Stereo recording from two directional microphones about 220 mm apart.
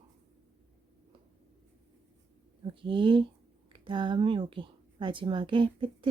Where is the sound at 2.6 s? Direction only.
20° right (ahead or behind).